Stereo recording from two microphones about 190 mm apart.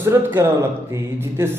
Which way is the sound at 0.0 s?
10° right (ahead or behind).